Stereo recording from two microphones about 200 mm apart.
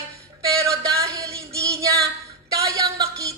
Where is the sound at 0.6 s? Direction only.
15° right (ahead or behind).